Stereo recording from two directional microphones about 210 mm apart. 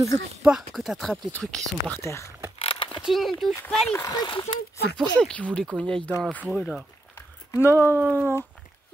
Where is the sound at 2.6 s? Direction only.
25° left (ahead or behind).